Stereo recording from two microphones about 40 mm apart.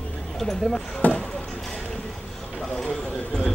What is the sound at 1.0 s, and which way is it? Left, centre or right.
Speech, left.